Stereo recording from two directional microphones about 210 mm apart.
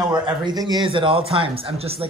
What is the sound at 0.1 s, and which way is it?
A man's voice, 20° right (ahead or behind).